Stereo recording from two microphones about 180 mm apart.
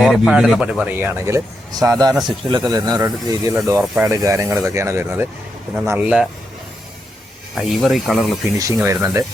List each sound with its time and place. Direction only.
0.0 s speech: centre (ahead or behind); by 3.6 s 15° right (ahead or behind)
3.8 s speech: 5° right (ahead or behind)
4.1 s speech: 20° right (ahead or behind)
7.5 s speech: centre (ahead or behind)
8.5 s speech: 15° right (ahead or behind)